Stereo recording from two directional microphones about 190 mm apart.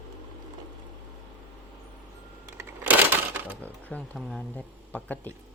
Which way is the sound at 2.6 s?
10° right (ahead or behind).